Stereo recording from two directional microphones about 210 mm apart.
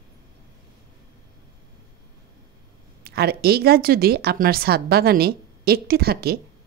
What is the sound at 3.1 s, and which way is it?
A woman's voice, 45° right (ahead or behind).